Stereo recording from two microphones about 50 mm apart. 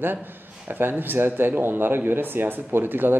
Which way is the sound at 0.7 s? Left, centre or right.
Right.